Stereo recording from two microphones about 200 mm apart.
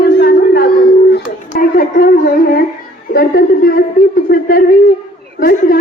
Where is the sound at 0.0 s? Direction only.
50° left (ahead or behind).